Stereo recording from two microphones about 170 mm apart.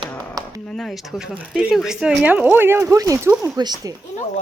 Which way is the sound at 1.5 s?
5° right (ahead or behind).